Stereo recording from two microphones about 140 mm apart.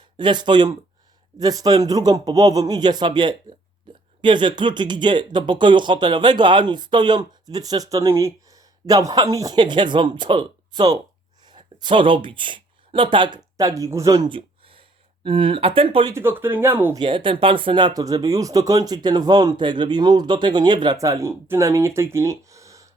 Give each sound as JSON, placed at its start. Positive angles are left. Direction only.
{"t": 0.2, "sound": "a woman's voice", "side_deg": -35}
{"t": 14.3, "sound": "a sound", "side_deg": -40}
{"t": 16.0, "sound": "speech", "side_deg": -15}
{"t": 16.9, "sound": "speech", "side_deg": -35}